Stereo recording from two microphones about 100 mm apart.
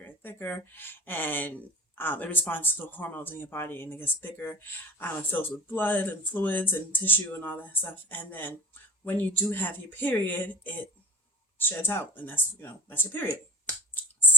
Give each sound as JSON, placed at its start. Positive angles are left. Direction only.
{"t": 0.0, "sound": "speech", "side_deg": 20}